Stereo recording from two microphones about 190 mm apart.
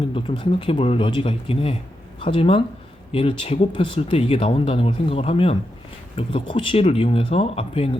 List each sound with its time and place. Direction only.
0.1 s speech: 25° left (ahead or behind)